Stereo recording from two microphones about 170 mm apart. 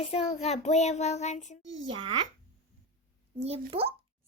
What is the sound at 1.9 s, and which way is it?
Speech, 30° right (ahead or behind).